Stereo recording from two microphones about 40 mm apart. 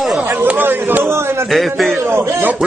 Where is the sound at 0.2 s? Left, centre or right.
Right.